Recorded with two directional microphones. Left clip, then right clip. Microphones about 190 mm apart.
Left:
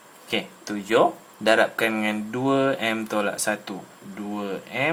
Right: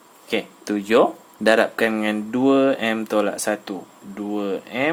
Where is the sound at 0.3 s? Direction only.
40° right (ahead or behind).